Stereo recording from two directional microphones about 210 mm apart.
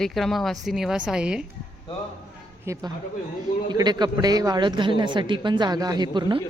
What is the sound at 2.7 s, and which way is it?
A woman's voice, 15° right (ahead or behind).